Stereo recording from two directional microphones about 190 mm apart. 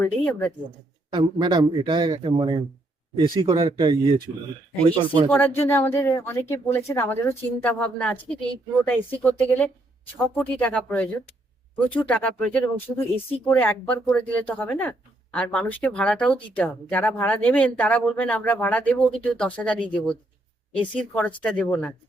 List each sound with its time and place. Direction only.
0.0 s speech: 10° left (ahead or behind)
1.1 s a man's voice: 25° right (ahead or behind)
5.3 s speech: 10° left (ahead or behind)